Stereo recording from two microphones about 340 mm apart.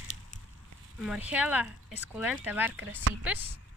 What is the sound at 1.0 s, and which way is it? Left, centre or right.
Speech, centre.